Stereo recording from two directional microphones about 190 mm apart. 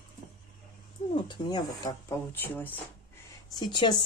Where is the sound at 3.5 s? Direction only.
25° left (ahead or behind).